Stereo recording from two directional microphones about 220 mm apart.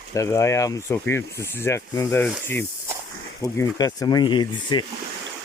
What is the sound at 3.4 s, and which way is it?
Speech, 15° left (ahead or behind).